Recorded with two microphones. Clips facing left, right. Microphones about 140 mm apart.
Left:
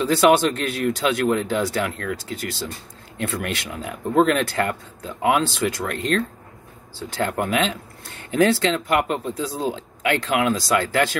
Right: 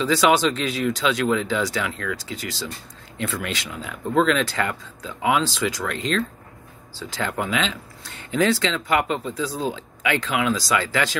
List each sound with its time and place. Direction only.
0.0 s speech: 55° left (ahead or behind)